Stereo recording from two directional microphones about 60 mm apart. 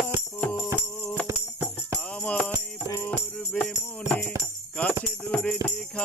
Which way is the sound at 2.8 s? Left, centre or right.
Left.